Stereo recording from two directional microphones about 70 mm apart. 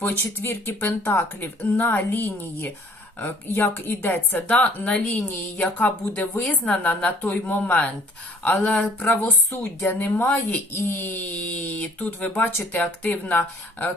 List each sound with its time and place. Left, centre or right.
0.2 s speech: left; by 8.8 s centre
9.0 s speech: left